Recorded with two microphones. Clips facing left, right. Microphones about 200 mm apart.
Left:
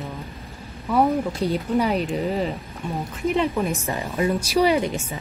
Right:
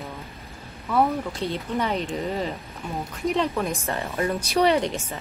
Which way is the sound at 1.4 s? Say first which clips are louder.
Left 5 dB; 40° left (ahead or behind).